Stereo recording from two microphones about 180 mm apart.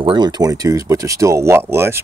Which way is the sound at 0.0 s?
25° right (ahead or behind).